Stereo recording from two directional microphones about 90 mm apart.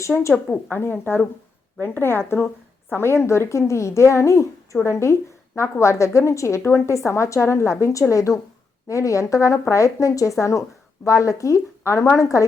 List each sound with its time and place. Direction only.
0.3 s a woman's voice: 15° left (ahead or behind); by 12.5 s 35° left (ahead or behind)